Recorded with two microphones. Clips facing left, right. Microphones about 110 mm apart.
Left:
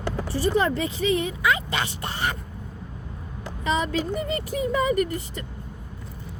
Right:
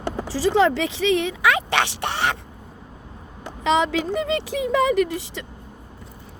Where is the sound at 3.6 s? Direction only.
90° right.